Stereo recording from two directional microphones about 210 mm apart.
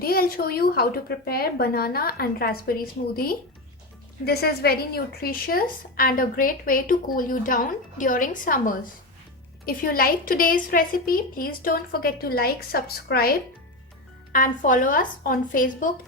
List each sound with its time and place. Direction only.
0.0 s a woman's voice: 45° left (ahead or behind)
14.3 s speech: 40° left (ahead or behind)